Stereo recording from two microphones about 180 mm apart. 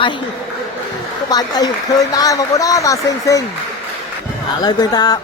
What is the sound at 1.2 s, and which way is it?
Speech, 20° left (ahead or behind).